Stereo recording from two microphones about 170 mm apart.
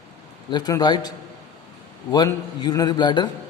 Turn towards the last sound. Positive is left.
turn(degrees=25)  # may be behind; listen again after turning